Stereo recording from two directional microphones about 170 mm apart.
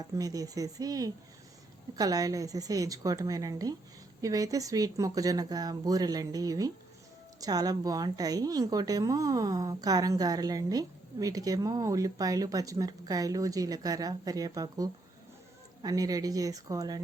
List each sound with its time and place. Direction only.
0.0 s a woman's voice: 20° right (ahead or behind)